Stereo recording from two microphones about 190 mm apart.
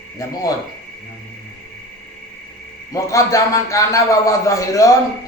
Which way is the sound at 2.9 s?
15° left (ahead or behind).